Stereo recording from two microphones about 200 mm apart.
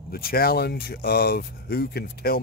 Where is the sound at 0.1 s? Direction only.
50° left (ahead or behind).